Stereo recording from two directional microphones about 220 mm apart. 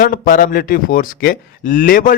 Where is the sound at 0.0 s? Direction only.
40° left (ahead or behind).